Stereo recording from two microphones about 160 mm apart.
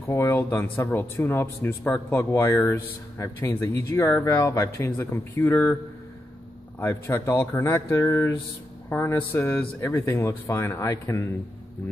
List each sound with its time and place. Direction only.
0.0 s speech: 20° left (ahead or behind)
6.8 s speech: 15° left (ahead or behind)